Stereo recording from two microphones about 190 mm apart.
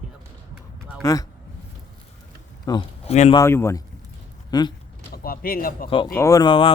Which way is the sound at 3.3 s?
15° left (ahead or behind).